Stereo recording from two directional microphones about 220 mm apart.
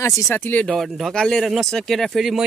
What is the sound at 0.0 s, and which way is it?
Speech, 10° left (ahead or behind).